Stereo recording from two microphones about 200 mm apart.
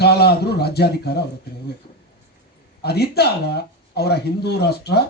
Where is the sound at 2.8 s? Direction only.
55° left (ahead or behind).